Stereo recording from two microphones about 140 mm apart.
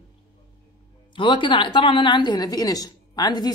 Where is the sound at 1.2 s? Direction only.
35° left (ahead or behind).